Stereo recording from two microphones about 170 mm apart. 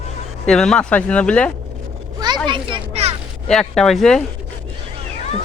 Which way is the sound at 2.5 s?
30° right (ahead or behind).